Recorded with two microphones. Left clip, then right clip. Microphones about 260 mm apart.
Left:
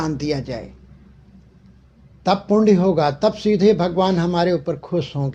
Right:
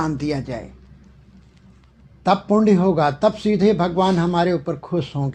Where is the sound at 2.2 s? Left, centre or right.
Right.